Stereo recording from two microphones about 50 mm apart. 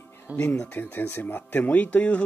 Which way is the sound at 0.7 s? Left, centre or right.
Left.